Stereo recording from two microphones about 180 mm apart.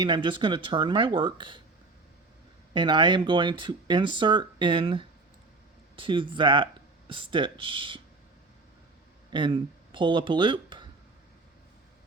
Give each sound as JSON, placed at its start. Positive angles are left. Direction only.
{"t": 0.0, "sound": "speech", "side_deg": -25}
{"t": 2.7, "sound": "speech", "side_deg": -25}
{"t": 9.3, "sound": "speech", "side_deg": -25}